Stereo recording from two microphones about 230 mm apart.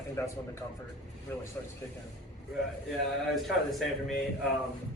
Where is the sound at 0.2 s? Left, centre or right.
Centre.